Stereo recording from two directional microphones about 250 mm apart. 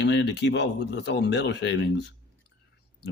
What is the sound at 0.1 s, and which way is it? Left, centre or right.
Speech, left.